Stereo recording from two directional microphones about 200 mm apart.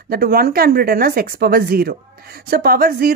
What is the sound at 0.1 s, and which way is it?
Speech, 50° right (ahead or behind).